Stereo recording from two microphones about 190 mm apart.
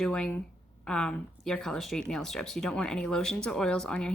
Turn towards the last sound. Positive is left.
turn(degrees=5)  # may be behind; listen again after turning